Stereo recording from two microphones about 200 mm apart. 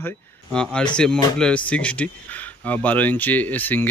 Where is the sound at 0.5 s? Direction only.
5° left (ahead or behind).